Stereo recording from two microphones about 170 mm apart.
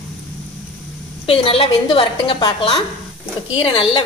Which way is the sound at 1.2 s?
35° left (ahead or behind).